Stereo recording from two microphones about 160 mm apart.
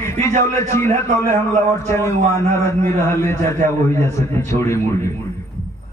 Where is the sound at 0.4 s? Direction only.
15° left (ahead or behind).